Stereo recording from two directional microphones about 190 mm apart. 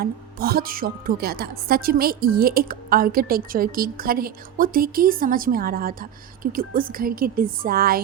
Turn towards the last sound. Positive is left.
turn(degrees=-50)  # may be behind; listen again after turning